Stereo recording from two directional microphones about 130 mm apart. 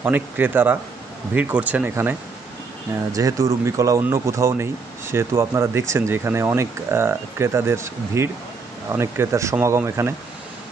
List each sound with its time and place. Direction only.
0.0 s speech: 15° right (ahead or behind)
3.1 s speech: 25° right (ahead or behind)